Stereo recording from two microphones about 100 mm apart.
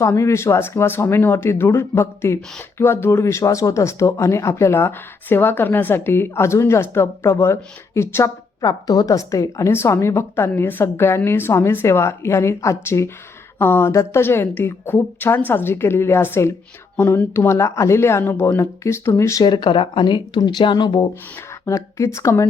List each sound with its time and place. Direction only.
0.0 s speech: 30° left (ahead or behind)
8.6 s speech: 40° left (ahead or behind)
19.4 s speech: 50° left (ahead or behind)
21.7 s speech: 30° left (ahead or behind)